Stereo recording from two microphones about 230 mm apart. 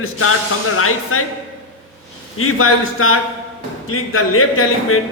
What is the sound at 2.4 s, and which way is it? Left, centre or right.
A man's voice, left.